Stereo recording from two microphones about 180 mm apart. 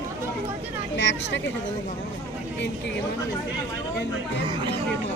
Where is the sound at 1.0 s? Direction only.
85° left.